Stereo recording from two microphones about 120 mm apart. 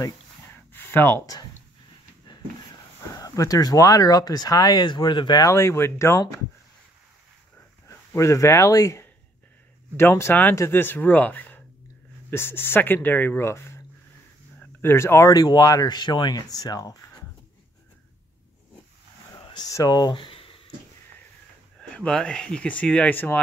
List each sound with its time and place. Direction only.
0.7 s a sound: 20° left (ahead or behind)
1.2 s speech: 35° left (ahead or behind)
3.2 s speech: 30° left (ahead or behind)
5.5 s speech: 25° left (ahead or behind)
8.1 s speech: 25° left (ahead or behind)
19.3 s a sound: 30° left (ahead or behind); by 20.7 s 50° left (ahead or behind)
21.7 s speech: 5° left (ahead or behind)